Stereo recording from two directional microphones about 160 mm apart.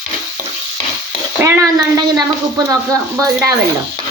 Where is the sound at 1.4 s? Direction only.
15° right (ahead or behind).